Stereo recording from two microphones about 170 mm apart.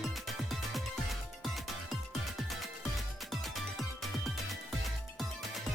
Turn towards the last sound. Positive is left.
turn(degrees=0)  # may be behind; listen again after turning